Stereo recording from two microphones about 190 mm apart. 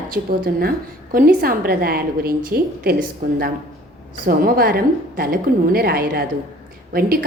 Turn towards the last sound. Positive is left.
turn(degrees=-50)  # may be behind; listen again after turning